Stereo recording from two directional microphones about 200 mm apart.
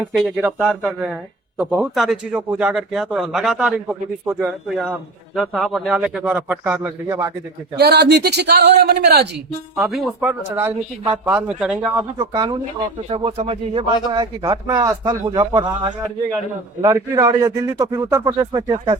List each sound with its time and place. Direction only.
0.0 s a man's voice: centre (ahead or behind)
7.8 s a man's voice: 55° right (ahead or behind)
9.7 s a man's voice: centre (ahead or behind)
12.1 s a man's voice: 20° right (ahead or behind)